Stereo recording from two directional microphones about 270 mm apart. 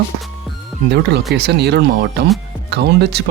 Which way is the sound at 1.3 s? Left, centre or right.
Right.